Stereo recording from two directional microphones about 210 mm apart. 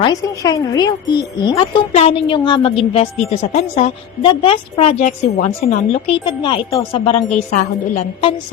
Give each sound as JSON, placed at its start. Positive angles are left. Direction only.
{"t": 0.0, "sound": "a woman's voice", "side_deg": 15}